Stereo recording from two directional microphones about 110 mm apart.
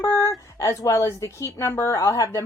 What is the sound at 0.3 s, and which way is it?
A woman's voice, 30° left (ahead or behind).